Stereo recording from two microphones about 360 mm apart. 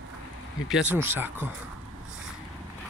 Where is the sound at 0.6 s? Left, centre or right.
Centre.